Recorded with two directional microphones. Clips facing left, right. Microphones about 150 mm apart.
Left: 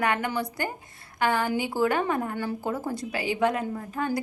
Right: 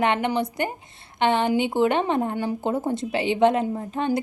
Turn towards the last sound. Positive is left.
turn(degrees=-25)  # may be behind; listen again after turning